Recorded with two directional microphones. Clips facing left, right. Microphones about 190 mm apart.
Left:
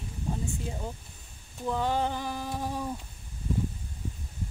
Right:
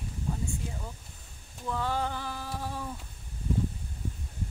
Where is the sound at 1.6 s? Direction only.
20° left (ahead or behind).